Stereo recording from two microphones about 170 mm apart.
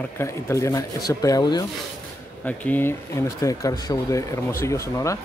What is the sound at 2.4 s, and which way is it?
Speech, 10° left (ahead or behind).